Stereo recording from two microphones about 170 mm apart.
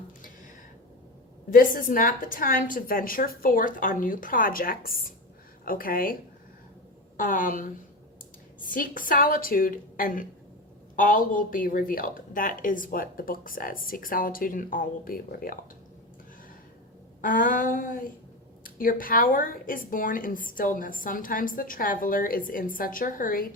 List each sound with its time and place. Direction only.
1.5 s speech: 55° left (ahead or behind)
7.2 s a woman's voice: 50° left (ahead or behind)
17.2 s a woman's voice: 55° left (ahead or behind)